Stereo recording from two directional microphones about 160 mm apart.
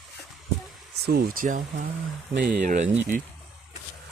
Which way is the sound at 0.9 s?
80° right.